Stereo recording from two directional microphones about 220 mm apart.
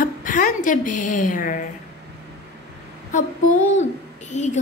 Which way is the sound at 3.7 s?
30° left (ahead or behind).